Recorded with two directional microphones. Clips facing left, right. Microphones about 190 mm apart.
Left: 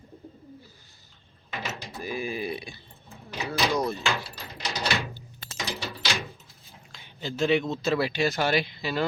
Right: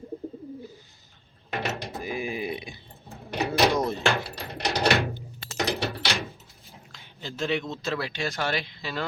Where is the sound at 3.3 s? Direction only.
60° right (ahead or behind).